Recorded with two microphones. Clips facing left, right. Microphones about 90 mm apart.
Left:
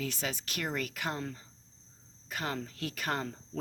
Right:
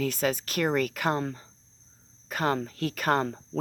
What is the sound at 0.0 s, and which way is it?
Speech, 50° right (ahead or behind).